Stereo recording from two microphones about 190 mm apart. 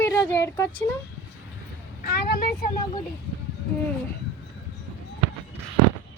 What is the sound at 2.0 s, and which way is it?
Vehicle, 50° left (ahead or behind).